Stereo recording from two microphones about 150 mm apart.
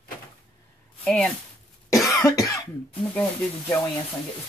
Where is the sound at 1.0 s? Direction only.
5° left (ahead or behind).